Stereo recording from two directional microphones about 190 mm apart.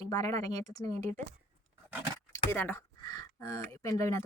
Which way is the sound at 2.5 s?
10° left (ahead or behind).